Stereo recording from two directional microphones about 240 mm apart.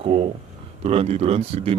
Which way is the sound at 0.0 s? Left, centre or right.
Right.